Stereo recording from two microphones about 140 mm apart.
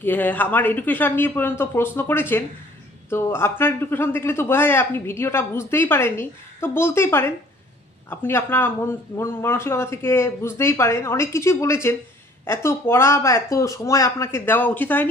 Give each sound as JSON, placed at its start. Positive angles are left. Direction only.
{"t": 0.0, "sound": "a man's voice", "side_deg": 15}